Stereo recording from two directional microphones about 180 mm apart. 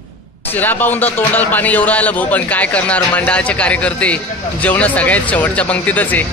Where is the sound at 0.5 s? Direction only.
10° left (ahead or behind).